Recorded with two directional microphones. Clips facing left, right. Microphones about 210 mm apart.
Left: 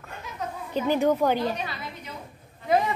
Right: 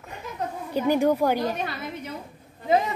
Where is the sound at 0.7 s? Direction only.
10° right (ahead or behind).